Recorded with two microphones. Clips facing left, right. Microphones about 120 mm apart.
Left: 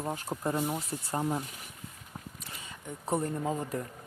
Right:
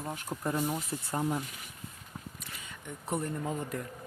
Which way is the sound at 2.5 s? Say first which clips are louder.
Left 3 dB; 35° left (ahead or behind).